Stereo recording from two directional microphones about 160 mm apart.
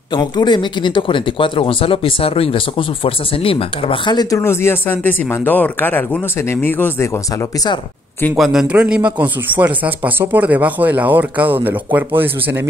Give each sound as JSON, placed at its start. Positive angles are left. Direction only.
{"t": 0.1, "sound": "speech", "side_deg": 25}
{"t": 8.4, "sound": "a man's voice", "side_deg": -5}